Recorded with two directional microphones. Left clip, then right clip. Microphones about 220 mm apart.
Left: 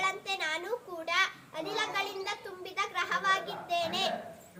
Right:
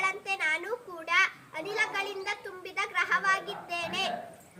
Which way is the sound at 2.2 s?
10° right (ahead or behind).